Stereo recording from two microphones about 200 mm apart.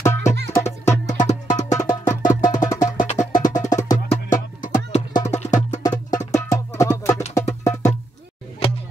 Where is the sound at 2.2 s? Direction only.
40° left (ahead or behind).